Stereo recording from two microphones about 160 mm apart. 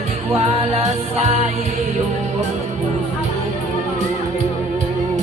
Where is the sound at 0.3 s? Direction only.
40° right (ahead or behind).